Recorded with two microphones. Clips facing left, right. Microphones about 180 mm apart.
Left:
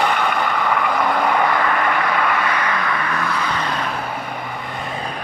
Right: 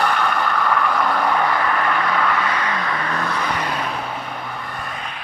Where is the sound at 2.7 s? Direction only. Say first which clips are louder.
Left 1 dB; 20° right (ahead or behind).